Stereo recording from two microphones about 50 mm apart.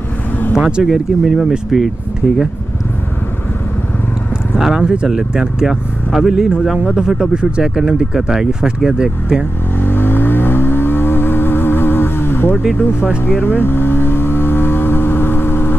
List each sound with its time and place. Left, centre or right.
0.6 s speech: centre
0.8 s speech: centre
4.6 s speech: centre
9.8 s vehicle: left